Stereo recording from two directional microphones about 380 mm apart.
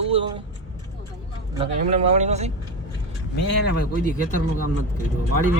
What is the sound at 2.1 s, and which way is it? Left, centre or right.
Speech, centre.